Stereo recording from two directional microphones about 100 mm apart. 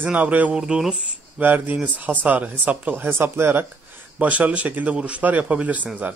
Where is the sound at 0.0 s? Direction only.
15° right (ahead or behind).